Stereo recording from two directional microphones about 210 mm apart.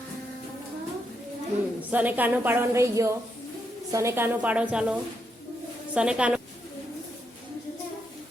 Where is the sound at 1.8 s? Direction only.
10° right (ahead or behind).